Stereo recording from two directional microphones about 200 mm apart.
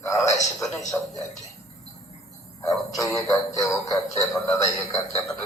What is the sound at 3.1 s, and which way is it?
A man's voice, 15° left (ahead or behind).